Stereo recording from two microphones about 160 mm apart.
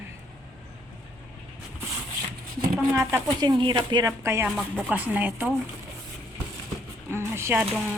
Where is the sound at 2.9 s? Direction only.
15° right (ahead or behind).